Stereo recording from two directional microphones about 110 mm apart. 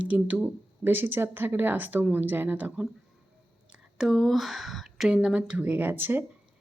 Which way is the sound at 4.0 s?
Centre (ahead or behind).